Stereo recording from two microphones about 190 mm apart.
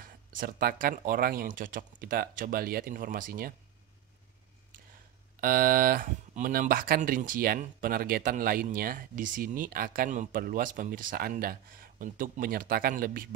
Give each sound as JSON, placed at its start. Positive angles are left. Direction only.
{"t": 0.3, "sound": "speech", "side_deg": -45}
{"t": 5.4, "sound": "speech", "side_deg": -50}